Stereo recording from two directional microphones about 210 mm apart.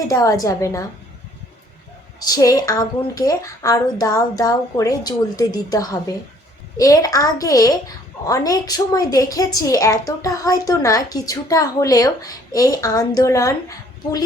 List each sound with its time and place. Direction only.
0.1 s a woman's voice: 15° left (ahead or behind)
2.2 s a woman's voice: 15° left (ahead or behind)